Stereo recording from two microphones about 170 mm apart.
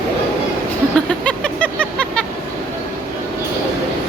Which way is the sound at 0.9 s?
5° left (ahead or behind).